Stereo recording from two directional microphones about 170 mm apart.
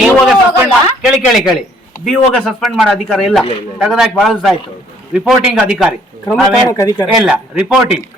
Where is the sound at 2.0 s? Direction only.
5° left (ahead or behind).